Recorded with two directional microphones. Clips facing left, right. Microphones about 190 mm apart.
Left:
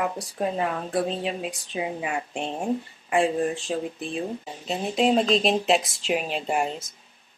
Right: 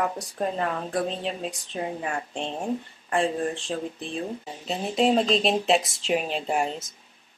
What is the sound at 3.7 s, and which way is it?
Speech, 10° left (ahead or behind).